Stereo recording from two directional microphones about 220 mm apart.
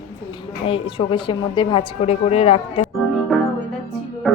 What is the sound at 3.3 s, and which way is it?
Music, centre (ahead or behind).